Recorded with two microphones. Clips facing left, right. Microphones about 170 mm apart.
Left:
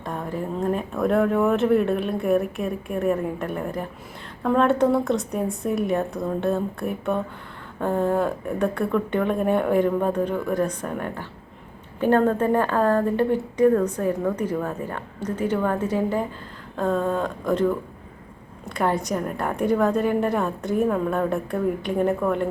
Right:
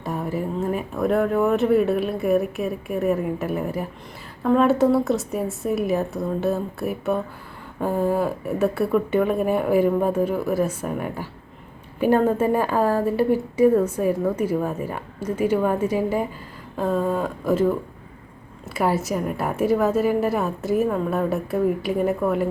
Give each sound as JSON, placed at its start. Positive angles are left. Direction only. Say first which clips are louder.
{"t": 0.0, "sound": "a woman's voice", "louder": "right 3 dB", "side_deg": -5}